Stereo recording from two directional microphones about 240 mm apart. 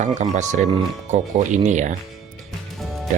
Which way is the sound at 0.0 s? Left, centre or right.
Right.